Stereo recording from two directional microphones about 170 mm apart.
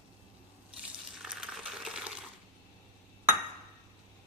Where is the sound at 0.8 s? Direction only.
5° right (ahead or behind).